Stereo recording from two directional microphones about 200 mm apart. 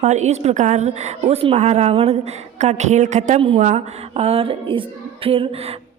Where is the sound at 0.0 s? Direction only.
35° right (ahead or behind).